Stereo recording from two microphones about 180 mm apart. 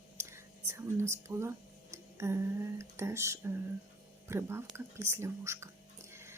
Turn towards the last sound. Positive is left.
turn(degrees=-15)  # may be behind; listen again after turning